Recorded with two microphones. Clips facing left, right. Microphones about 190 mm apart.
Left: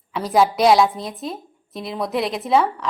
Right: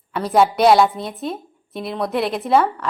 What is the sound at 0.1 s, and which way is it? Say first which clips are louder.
A woman's voice: right 1 dB; centre (ahead or behind).